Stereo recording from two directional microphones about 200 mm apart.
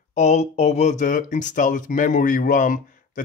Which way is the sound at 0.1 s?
35° left (ahead or behind).